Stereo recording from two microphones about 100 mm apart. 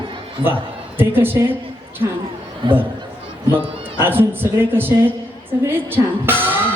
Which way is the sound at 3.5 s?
20° right (ahead or behind).